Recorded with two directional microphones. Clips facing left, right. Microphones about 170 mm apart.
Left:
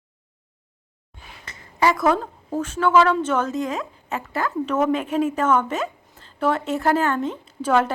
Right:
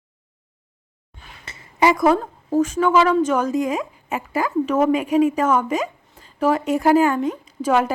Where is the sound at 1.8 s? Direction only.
15° right (ahead or behind).